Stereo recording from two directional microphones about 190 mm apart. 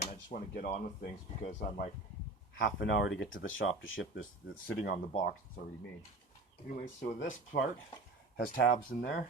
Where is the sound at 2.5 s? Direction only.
75° left (ahead or behind).